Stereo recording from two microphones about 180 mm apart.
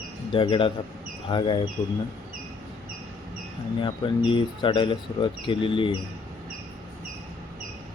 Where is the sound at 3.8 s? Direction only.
30° left (ahead or behind).